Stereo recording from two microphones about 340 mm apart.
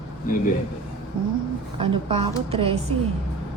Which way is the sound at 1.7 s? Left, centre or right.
Centre.